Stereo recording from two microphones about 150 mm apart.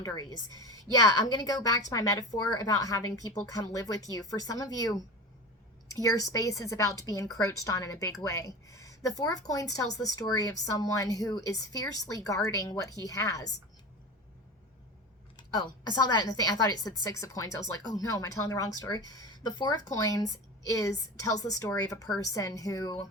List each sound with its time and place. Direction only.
0.0 s speech: 25° left (ahead or behind)
15.4 s speech: 30° left (ahead or behind)